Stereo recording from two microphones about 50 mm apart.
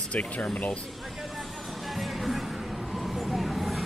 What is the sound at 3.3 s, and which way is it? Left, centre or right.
Vehicle, centre.